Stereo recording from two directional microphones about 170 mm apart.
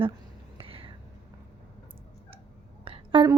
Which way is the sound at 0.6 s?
35° right (ahead or behind).